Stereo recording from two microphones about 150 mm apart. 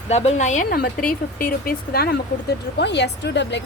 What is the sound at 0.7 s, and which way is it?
Speech, 75° left (ahead or behind).